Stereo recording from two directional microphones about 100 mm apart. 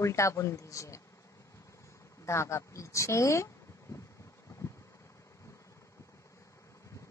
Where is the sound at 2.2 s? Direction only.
30° left (ahead or behind).